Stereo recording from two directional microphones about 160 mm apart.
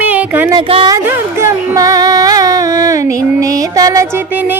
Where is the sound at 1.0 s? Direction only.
15° right (ahead or behind).